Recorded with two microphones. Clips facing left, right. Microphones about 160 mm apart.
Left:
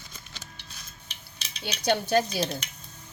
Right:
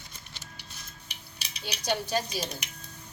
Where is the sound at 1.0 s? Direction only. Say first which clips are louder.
Even; 15° right (ahead or behind).